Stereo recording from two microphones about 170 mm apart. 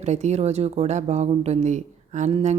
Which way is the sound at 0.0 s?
40° right (ahead or behind).